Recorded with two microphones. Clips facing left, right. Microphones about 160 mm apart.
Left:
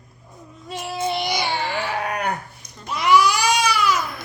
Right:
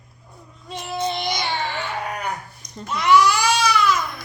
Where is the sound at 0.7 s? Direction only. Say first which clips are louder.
Left 1 dB; 5° left (ahead or behind).